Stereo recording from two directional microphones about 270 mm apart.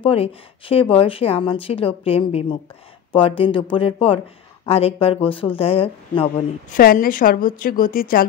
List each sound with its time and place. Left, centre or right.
0.0 s speech: left
6.7 s a woman's voice: left